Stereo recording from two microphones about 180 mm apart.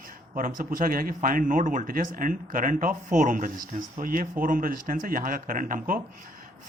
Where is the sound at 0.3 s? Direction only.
50° right (ahead or behind).